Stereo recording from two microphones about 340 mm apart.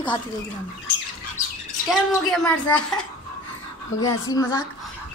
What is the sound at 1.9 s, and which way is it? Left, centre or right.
Speech, centre.